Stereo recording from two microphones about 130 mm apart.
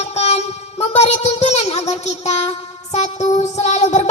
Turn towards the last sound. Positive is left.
turn(degrees=60)  # may be behind; listen again after turning